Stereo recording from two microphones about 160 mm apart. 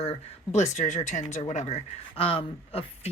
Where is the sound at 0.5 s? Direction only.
45° left (ahead or behind).